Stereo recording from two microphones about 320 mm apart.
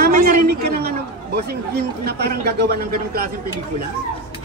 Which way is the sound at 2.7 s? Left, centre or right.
Right.